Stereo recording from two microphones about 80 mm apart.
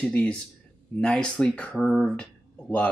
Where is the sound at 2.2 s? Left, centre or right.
Centre.